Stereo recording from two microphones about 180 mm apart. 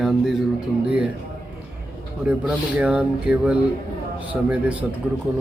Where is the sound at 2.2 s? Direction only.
5° right (ahead or behind).